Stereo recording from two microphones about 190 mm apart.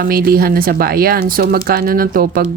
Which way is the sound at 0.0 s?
55° right (ahead or behind).